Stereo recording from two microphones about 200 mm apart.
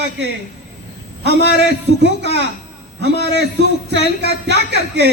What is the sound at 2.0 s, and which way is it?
Speech, 60° right (ahead or behind).